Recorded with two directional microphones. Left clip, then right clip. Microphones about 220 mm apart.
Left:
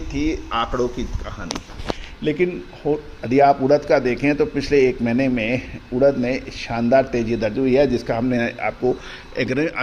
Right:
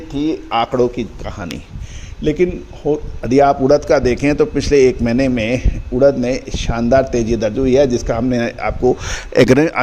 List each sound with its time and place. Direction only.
0.2 s speech: 25° right (ahead or behind)
2.2 s a man's voice: 40° right (ahead or behind)
9.1 s speech: 55° right (ahead or behind)